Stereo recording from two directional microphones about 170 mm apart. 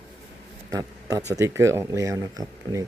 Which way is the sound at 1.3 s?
15° right (ahead or behind).